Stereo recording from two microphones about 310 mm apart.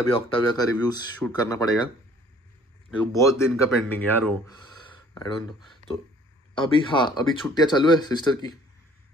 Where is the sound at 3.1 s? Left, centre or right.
Centre.